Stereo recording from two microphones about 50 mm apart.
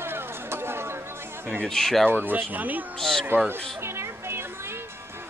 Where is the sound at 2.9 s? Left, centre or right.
Centre.